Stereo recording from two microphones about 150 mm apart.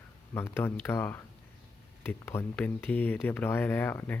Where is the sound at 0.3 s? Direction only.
15° left (ahead or behind).